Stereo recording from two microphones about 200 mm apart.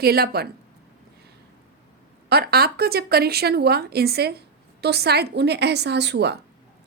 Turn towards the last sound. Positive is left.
turn(degrees=-55)  # may be behind; listen again after turning